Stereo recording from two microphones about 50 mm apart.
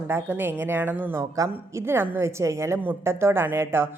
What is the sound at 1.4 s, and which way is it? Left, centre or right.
Speech, right.